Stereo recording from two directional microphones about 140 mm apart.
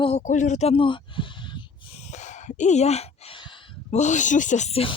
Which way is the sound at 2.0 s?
55° left (ahead or behind).